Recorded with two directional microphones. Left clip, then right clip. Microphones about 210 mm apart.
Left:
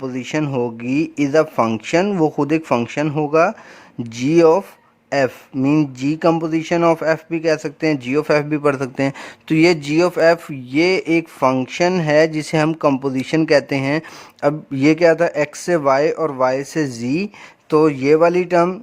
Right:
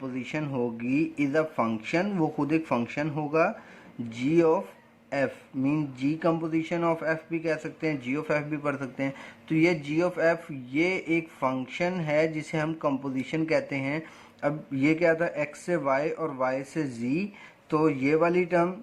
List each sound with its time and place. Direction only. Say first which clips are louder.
0.0 s speech: left 11 dB; 45° left (ahead or behind)